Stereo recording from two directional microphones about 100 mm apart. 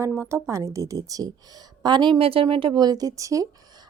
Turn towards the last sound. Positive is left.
turn(degrees=-35)  # may be behind; listen again after turning